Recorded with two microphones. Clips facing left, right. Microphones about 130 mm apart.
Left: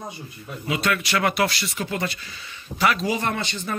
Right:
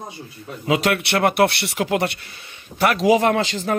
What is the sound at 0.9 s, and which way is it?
Speech, 55° right (ahead or behind).